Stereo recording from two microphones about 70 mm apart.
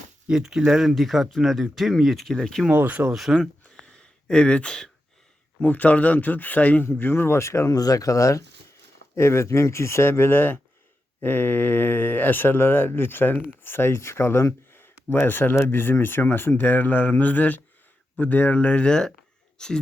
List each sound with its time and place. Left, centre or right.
0.3 s speech: centre
2.6 s speech: right
3.1 s speech: centre
3.6 s a sound: centre
5.5 s speech: left
7.7 s speech: left
9.1 s speech: left; by 19.8 s centre